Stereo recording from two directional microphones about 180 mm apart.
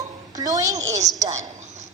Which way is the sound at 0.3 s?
20° right (ahead or behind).